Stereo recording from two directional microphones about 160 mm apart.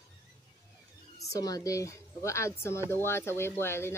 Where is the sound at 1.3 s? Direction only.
25° left (ahead or behind).